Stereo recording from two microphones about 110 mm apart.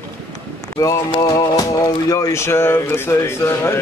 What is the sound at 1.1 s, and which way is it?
Music, 35° left (ahead or behind).